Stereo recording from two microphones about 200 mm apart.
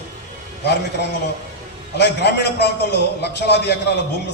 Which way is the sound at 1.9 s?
55° left (ahead or behind).